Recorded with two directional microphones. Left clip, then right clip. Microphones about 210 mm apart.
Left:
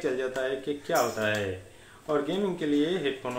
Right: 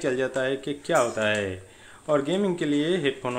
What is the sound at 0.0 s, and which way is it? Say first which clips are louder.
Speech: right 4 dB; 55° right (ahead or behind).